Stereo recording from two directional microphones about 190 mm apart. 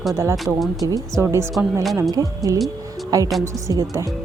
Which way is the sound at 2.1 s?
20° right (ahead or behind).